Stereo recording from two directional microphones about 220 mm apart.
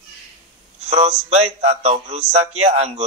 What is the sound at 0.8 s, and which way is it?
A man's voice, 30° right (ahead or behind).